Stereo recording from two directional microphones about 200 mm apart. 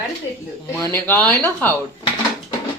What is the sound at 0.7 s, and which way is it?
Speech, 15° left (ahead or behind).